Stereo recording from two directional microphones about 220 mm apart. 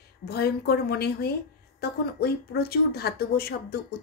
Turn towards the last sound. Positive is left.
turn(degrees=45)  # may be behind; listen again after turning